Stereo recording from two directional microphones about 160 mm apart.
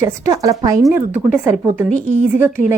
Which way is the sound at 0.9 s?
10° right (ahead or behind).